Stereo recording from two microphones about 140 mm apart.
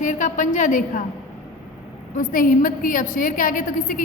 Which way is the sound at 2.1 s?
75° left (ahead or behind).